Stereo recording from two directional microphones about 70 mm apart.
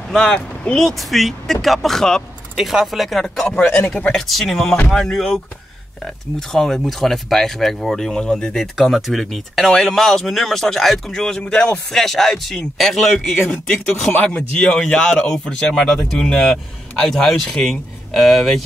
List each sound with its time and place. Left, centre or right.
0.1 s speech: centre
2.5 s speech: centre
3.6 s speech: left
4.1 s speech: centre
8.7 s speech: centre
11.4 s speech: centre
11.9 s speech: centre
14.1 s speech: centre